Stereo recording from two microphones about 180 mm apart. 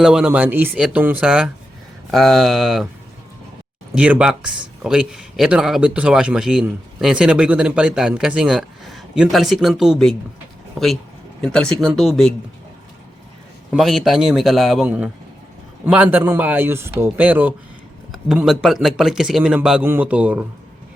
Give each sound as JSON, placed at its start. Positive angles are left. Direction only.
{"t": 0.0, "sound": "speech", "side_deg": -5}
{"t": 3.9, "sound": "speech", "side_deg": -5}
{"t": 13.7, "sound": "speech", "side_deg": 0}